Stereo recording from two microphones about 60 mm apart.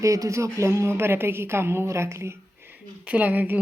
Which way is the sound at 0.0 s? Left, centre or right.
Right.